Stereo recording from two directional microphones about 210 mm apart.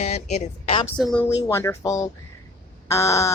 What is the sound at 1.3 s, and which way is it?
A woman's voice, 15° left (ahead or behind).